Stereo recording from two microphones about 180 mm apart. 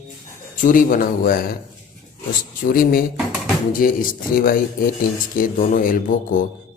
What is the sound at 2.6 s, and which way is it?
A man's voice, 50° left (ahead or behind).